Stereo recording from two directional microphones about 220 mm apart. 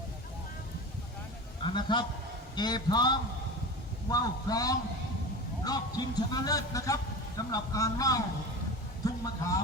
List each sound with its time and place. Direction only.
1.6 s a man's voice: 20° left (ahead or behind)